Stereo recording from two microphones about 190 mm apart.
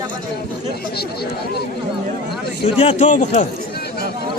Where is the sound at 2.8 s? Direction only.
35° left (ahead or behind).